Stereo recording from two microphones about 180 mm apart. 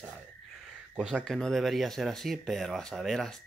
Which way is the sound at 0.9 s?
5° right (ahead or behind).